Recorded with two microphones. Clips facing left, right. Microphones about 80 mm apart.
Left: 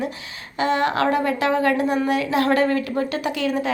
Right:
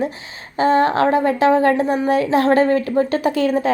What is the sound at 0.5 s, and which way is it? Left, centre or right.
A woman's voice, right.